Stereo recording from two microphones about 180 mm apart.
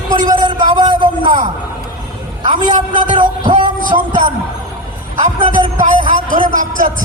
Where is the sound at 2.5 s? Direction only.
45° right (ahead or behind).